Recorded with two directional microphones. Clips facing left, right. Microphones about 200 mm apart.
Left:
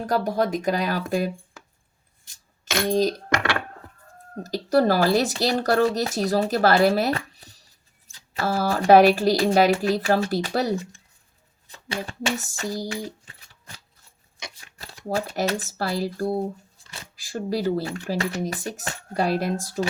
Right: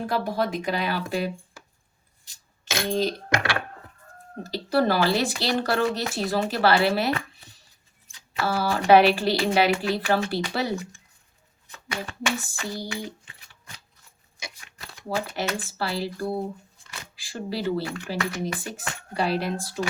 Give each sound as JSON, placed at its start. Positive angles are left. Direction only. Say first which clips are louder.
{"t": 0.0, "sound": "speech", "louder": "left 3 dB", "side_deg": 45}
{"t": 2.8, "sound": "speech", "louder": "left 4 dB", "side_deg": 40}
{"t": 4.4, "sound": "speech", "louder": "left 3 dB", "side_deg": 45}
{"t": 11.7, "sound": "speech", "louder": "left 2 dB", "side_deg": 30}
{"t": 12.4, "sound": "speech", "louder": "left 4 dB", "side_deg": 40}